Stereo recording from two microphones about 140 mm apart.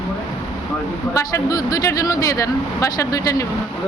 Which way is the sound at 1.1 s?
25° left (ahead or behind).